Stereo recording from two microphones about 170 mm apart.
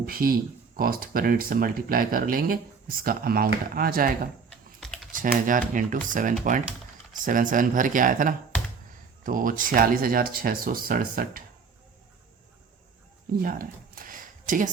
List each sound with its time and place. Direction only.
0.0 s speech: 60° right (ahead or behind)
5.5 s speech: 50° right (ahead or behind)
13.4 s a sound: 55° right (ahead or behind)